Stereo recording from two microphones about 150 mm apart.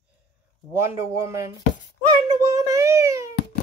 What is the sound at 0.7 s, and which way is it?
Speech, 15° right (ahead or behind).